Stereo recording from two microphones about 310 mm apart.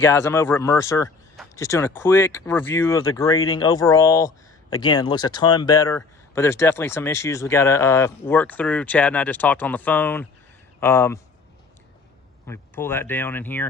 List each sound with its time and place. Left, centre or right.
0.0 s speech: centre
12.5 s speech: centre